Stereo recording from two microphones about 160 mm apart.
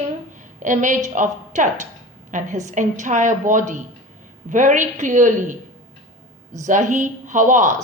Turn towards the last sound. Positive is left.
turn(degrees=-50)  # may be behind; listen again after turning